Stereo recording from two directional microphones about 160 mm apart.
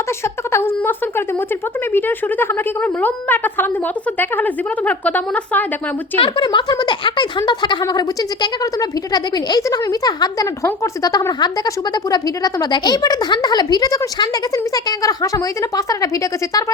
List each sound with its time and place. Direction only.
0.5 s speech: 15° left (ahead or behind)
6.1 s speech: 35° left (ahead or behind)